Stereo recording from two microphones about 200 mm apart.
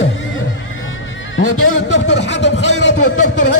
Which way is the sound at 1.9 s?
60° left (ahead or behind).